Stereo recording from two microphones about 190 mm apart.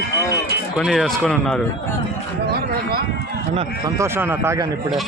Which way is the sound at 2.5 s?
55° right (ahead or behind).